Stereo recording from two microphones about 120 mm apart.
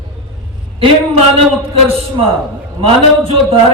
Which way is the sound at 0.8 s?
55° right (ahead or behind).